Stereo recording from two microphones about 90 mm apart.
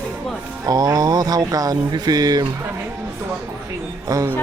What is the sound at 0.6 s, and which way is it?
Speech, 40° right (ahead or behind).